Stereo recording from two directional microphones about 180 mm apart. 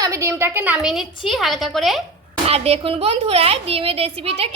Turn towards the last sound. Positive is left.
turn(degrees=-35)  # may be behind; listen again after turning